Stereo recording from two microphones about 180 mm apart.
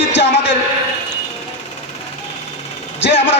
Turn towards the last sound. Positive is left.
turn(degrees=80)